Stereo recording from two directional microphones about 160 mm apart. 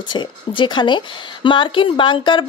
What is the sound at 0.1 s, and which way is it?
A woman's voice, 30° left (ahead or behind).